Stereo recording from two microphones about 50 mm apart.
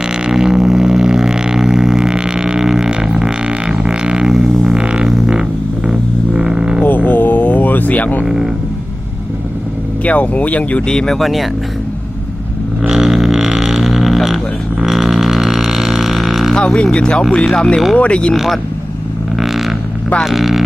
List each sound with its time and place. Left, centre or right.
0.1 s didgeridoo: centre
5.0 s didgeridoo: centre
5.3 s vehicle: centre
6.8 s a sound: left
8.2 s a sound: centre
10.0 s speech: left
11.2 s speech: centre
12.9 s didgeridoo: centre
16.6 s a sound: centre
16.9 s speech: centre
18.3 s speech: centre
19.4 s vehicle: centre
20.2 s speech: centre